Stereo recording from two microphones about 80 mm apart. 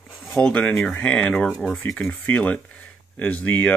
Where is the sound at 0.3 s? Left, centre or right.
Centre.